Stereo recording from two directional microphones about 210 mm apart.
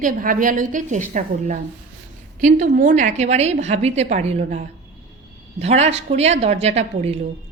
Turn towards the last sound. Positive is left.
turn(degrees=-30)  # may be behind; listen again after turning